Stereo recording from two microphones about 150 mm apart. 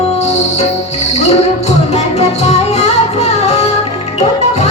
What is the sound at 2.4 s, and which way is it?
Music, 45° left (ahead or behind).